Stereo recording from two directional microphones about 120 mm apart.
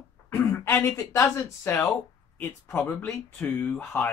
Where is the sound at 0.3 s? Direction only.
20° left (ahead or behind).